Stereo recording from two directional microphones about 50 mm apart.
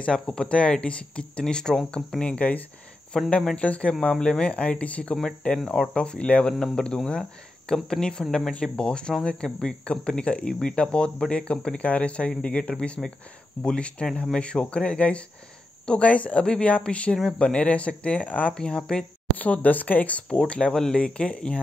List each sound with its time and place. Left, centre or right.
0.0 s speech: centre
2.3 s speech: left
3.1 s speech: centre
3.5 s speech: left
18.5 s speech: centre
19.3 s speech: left